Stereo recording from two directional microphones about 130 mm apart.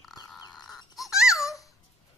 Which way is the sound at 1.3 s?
25° left (ahead or behind).